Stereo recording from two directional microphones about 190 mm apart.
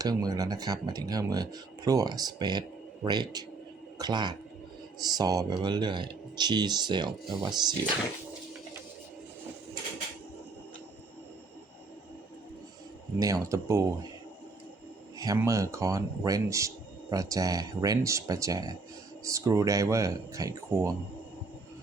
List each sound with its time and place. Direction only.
0.0 s speech: 20° right (ahead or behind)
13.1 s speech: 20° right (ahead or behind)
15.2 s speech: 15° right (ahead or behind)